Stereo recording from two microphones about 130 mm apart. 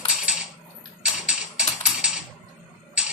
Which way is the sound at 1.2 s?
5° right (ahead or behind).